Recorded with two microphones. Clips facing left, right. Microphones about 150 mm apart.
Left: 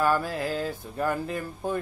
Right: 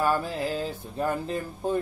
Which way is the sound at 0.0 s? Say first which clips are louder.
Left 1 dB; 20° right (ahead or behind).